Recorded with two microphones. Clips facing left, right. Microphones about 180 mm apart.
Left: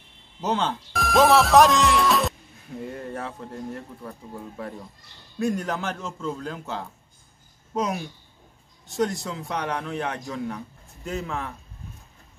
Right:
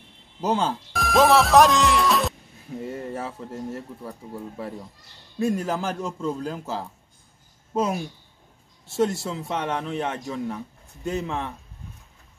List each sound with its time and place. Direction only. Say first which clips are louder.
0.4 s a man's voice: right 2 dB; 10° right (ahead or behind)
9.1 s speech: right 2 dB; 5° right (ahead or behind)
11.1 s speech: right 3 dB; 20° right (ahead or behind)